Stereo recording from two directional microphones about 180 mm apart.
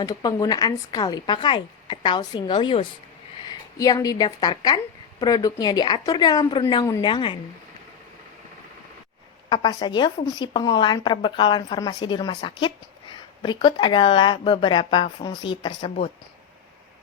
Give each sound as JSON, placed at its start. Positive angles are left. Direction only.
{"t": 0.0, "sound": "speech", "side_deg": 20}
{"t": 9.5, "sound": "speech", "side_deg": 20}